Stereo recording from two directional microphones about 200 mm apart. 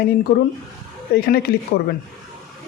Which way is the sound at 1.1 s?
45° left (ahead or behind).